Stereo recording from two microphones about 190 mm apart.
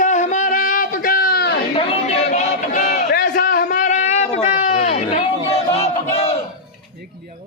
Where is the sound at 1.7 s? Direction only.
35° left (ahead or behind).